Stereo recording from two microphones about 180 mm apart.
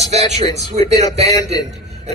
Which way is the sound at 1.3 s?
20° left (ahead or behind).